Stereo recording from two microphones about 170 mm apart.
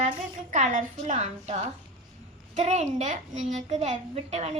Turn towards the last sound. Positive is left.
turn(degrees=-40)  # may be behind; listen again after turning